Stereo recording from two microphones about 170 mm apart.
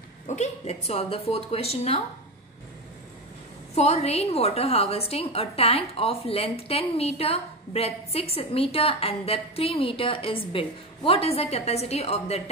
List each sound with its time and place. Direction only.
0.3 s a woman's voice: 40° left (ahead or behind)
3.7 s a woman's voice: 40° left (ahead or behind)